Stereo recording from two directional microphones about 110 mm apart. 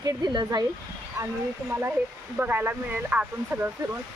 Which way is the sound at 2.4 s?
15° right (ahead or behind).